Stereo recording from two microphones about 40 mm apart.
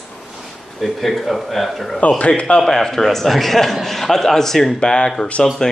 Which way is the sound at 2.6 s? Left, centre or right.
Centre.